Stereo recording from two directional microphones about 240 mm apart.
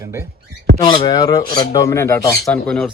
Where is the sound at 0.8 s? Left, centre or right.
Centre.